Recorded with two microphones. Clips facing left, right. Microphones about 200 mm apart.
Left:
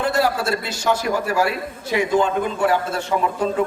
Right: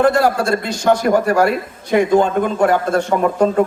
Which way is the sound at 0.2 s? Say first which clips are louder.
Right 4 dB; 50° right (ahead or behind).